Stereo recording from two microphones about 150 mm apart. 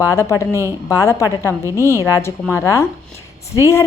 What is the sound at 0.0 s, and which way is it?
A woman's voice, 20° left (ahead or behind).